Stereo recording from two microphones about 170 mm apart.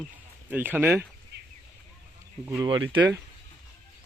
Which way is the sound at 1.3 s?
75° right (ahead or behind).